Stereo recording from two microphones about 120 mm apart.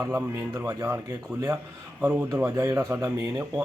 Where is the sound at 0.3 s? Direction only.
25° right (ahead or behind).